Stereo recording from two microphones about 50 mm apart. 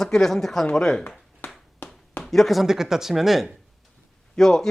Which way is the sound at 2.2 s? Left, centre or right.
Centre.